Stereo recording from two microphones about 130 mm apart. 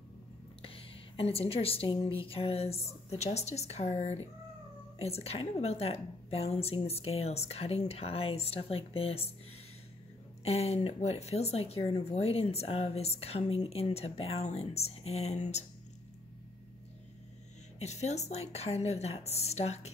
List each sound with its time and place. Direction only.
0.6 s a woman's voice: 45° left (ahead or behind)
10.4 s a woman's voice: 50° left (ahead or behind)
17.7 s a woman's voice: 60° left (ahead or behind)